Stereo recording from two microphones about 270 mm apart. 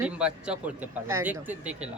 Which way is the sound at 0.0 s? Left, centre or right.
Centre.